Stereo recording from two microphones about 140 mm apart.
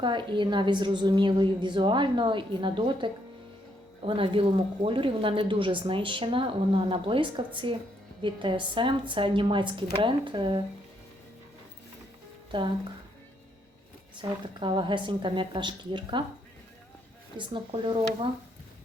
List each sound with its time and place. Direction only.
0.0 s speech: 35° right (ahead or behind)
12.5 s speech: 35° right (ahead or behind)
14.2 s speech: 35° right (ahead or behind)
17.3 s speech: 35° right (ahead or behind)